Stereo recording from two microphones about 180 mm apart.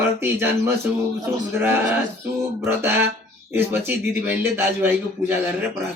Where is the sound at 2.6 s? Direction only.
10° right (ahead or behind).